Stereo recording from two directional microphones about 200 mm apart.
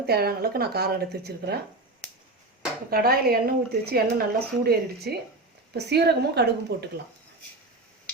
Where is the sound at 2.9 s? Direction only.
50° right (ahead or behind).